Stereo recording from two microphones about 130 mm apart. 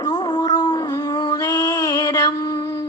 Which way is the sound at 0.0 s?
30° left (ahead or behind).